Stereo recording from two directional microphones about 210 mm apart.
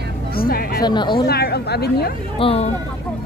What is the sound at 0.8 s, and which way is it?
Speech, 20° left (ahead or behind).